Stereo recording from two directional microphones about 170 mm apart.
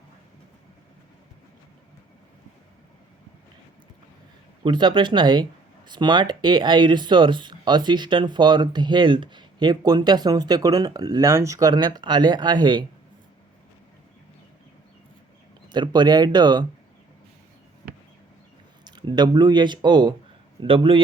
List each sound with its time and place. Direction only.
4.6 s speech: 25° right (ahead or behind)
15.7 s speech: 25° right (ahead or behind)
18.9 s a man's voice: 25° right (ahead or behind)